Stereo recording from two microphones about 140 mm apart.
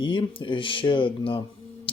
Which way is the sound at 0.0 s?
35° left (ahead or behind).